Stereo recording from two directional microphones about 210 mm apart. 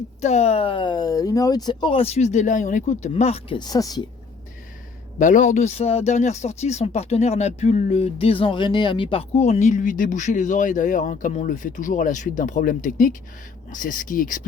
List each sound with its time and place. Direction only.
0.2 s speech: 30° left (ahead or behind); by 4.0 s 15° left (ahead or behind)
5.2 s speech: 35° left (ahead or behind)